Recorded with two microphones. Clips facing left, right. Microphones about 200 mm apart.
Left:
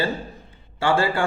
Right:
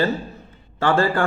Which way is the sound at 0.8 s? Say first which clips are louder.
Right 2 dB; 15° left (ahead or behind).